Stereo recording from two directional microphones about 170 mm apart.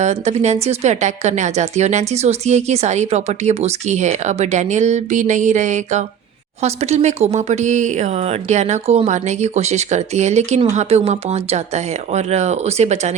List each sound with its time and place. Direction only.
0.0 s speech: 40° right (ahead or behind)